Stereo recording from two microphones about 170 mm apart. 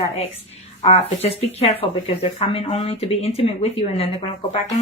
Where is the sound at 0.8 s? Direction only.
35° left (ahead or behind).